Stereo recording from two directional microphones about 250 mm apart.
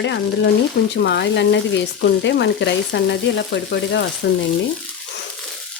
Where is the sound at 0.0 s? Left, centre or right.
Left.